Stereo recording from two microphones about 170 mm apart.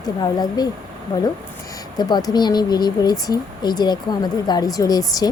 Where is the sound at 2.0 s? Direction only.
25° left (ahead or behind).